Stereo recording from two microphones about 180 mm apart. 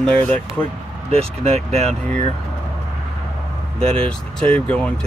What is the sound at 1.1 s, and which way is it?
Speech, 35° right (ahead or behind).